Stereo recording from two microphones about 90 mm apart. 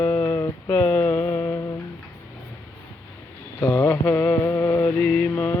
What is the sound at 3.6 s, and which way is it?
Mantra, 25° left (ahead or behind).